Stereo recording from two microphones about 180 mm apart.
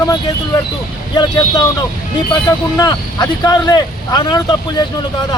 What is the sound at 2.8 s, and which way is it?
Speech, 20° left (ahead or behind).